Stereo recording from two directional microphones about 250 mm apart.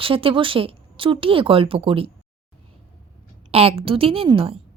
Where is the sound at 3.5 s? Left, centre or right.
Right.